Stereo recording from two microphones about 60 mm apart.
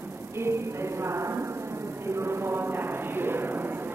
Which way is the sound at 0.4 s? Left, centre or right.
Right.